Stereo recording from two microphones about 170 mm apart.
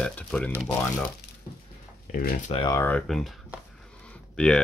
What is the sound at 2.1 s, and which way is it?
Speech, 60° left (ahead or behind).